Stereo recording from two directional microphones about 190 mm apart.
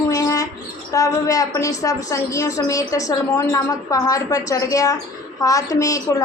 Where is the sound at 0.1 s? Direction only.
20° left (ahead or behind).